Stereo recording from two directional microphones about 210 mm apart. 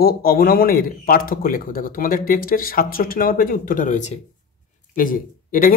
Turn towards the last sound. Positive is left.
turn(degrees=40)  # may be behind; listen again after turning